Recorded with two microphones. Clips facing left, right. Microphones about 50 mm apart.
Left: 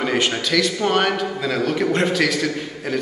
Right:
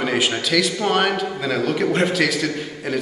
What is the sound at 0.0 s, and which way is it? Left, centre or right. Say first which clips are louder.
A man's voice: even; centre.